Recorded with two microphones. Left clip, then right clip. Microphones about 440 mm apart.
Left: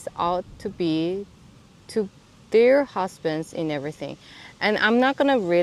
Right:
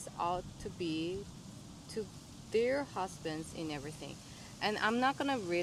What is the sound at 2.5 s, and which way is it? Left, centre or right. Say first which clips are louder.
Speech: left 16 dB; left.